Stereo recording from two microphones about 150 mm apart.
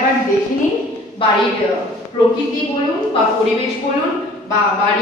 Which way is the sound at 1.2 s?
35° left (ahead or behind).